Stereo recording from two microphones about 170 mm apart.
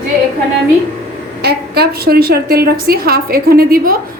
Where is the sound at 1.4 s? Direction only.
70° right (ahead or behind).